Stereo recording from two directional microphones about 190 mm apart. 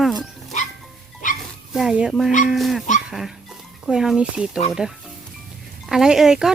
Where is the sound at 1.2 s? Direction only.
45° left (ahead or behind).